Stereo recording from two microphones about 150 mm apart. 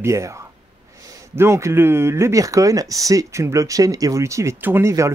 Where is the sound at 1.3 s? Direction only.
15° right (ahead or behind).